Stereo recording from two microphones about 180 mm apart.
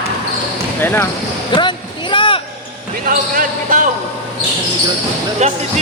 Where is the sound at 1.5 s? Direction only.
25° left (ahead or behind).